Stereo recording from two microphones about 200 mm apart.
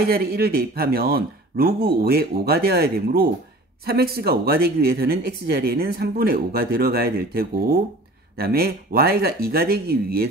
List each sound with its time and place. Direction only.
0.0 s speech: 50° right (ahead or behind)